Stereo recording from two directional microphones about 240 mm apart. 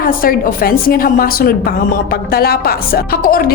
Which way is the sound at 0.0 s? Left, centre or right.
Left.